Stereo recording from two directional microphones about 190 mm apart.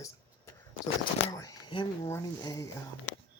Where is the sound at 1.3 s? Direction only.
20° left (ahead or behind).